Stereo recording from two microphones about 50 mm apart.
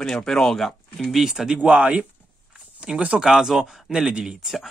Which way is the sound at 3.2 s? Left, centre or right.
Centre.